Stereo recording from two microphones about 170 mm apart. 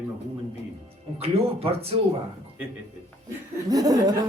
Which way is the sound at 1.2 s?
35° right (ahead or behind).